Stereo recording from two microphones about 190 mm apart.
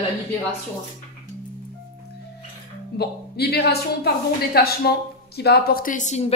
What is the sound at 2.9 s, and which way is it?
Speech, 55° left (ahead or behind).